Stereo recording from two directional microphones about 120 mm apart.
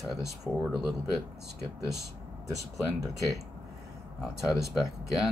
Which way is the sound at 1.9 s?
30° right (ahead or behind).